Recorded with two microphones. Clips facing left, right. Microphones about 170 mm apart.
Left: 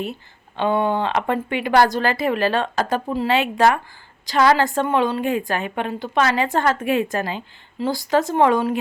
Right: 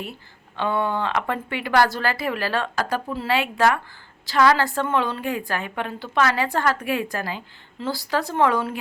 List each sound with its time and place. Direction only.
0.0 s a woman's voice: 20° left (ahead or behind)